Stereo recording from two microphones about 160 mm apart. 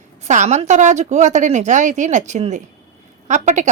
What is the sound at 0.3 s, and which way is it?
Speech, 45° right (ahead or behind).